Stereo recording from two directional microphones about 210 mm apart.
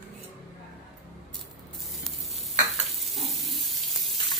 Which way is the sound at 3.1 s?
Centre (ahead or behind).